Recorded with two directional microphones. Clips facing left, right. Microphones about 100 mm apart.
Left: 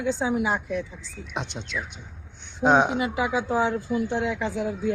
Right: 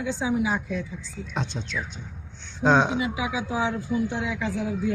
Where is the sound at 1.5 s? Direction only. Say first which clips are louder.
Right 2 dB; 25° left (ahead or behind).